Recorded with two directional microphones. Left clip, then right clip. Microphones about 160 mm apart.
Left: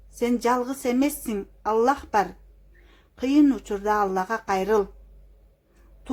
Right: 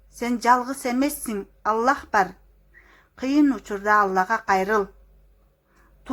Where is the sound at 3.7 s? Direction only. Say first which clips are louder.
Right 4 dB; 15° right (ahead or behind).